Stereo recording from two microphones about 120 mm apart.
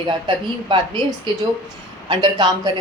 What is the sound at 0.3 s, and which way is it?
Speech, 40° right (ahead or behind).